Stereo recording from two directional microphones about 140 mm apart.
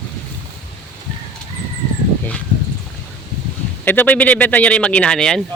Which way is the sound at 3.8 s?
15° left (ahead or behind).